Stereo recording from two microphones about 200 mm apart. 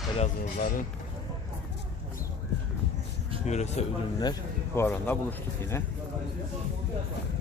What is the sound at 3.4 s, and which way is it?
Speech, 35° left (ahead or behind).